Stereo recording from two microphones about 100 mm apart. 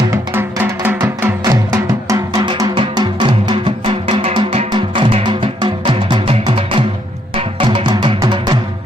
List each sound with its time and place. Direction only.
0.1 s music: 20° right (ahead or behind)
1.4 s music: 35° right (ahead or behind)
2.7 s music: 50° right (ahead or behind)